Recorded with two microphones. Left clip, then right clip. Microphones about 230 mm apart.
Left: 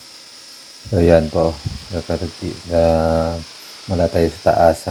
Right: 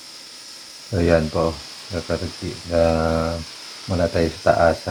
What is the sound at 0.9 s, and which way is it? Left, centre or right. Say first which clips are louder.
Mantra: left 6 dB; left.